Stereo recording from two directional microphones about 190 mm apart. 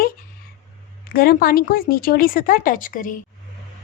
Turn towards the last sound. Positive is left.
turn(degrees=45)  # may be behind; listen again after turning